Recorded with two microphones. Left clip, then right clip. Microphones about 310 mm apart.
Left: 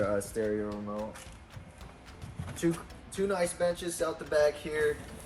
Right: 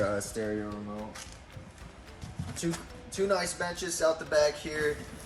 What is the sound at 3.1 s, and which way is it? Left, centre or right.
Speech, centre.